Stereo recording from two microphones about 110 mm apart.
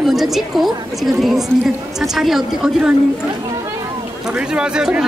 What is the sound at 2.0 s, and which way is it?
Speech, 5° right (ahead or behind).